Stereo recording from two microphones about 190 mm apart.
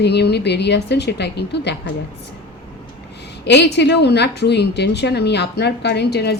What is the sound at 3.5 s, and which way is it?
A woman's voice, 65° left (ahead or behind).